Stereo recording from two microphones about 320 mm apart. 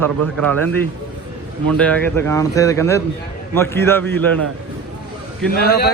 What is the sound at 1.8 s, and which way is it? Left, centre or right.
A man's voice, centre.